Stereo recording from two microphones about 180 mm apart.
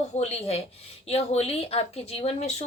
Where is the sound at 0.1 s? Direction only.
35° left (ahead or behind).